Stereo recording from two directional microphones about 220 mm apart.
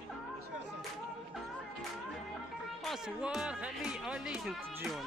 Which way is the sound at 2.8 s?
5° right (ahead or behind).